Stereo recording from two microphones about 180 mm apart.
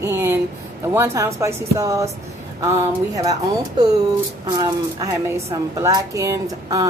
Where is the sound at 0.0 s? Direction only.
15° right (ahead or behind).